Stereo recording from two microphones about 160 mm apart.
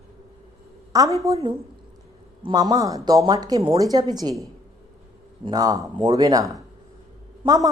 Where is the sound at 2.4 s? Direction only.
25° right (ahead or behind).